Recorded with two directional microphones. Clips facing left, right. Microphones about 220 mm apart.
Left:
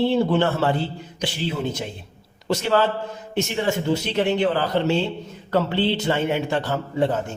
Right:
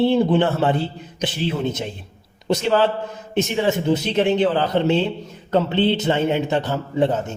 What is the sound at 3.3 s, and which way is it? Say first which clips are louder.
A man's voice: right 3 dB; 20° right (ahead or behind).